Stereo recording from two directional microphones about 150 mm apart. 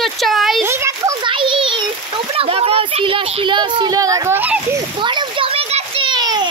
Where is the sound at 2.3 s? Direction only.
40° right (ahead or behind); by 4.8 s 15° right (ahead or behind).